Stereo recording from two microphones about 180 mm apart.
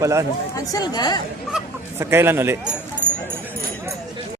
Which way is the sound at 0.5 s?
20° left (ahead or behind).